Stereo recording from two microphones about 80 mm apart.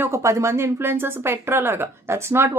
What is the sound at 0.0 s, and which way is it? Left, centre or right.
A woman's voice, right.